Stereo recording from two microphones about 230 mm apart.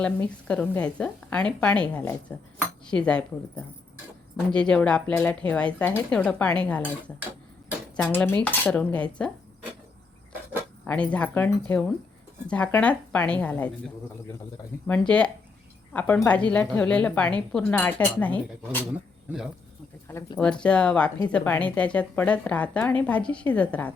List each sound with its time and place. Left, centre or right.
0.0 s a woman's voice: centre
7.9 s a woman's voice: centre
10.8 s a woman's voice: centre
14.8 s a woman's voice: centre
20.1 s speech: centre
20.4 s a woman's voice: centre